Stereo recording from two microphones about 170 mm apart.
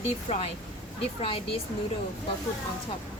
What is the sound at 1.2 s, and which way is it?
Speech, 30° left (ahead or behind).